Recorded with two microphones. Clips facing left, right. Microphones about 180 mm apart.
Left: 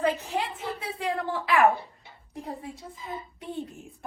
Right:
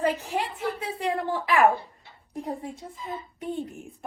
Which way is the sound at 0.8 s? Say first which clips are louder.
Even; 35° right (ahead or behind).